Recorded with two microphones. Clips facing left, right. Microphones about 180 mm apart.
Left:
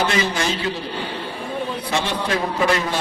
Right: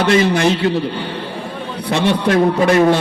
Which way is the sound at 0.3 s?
65° right (ahead or behind).